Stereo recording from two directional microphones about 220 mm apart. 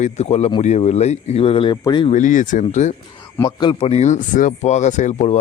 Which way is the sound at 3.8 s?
30° left (ahead or behind).